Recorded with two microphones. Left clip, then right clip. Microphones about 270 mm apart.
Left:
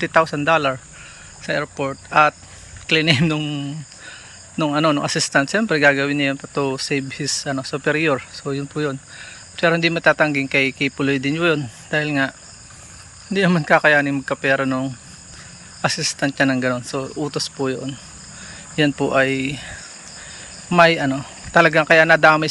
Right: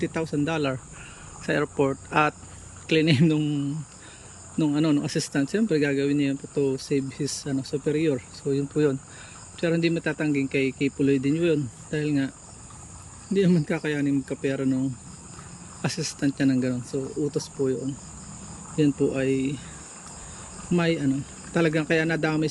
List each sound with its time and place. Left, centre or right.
0.0 s speech: centre
13.3 s speech: centre
18.8 s speech: centre
20.7 s speech: centre